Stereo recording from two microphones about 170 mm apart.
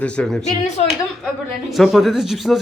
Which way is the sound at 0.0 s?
5° left (ahead or behind).